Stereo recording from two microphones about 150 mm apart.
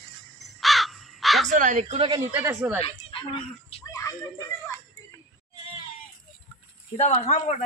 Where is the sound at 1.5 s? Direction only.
55° right (ahead or behind).